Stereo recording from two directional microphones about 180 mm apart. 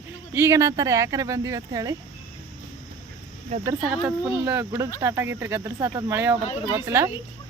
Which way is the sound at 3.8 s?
5° right (ahead or behind).